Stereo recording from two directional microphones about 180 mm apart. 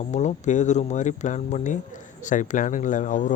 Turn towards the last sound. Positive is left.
turn(degrees=45)  # may be behind; listen again after turning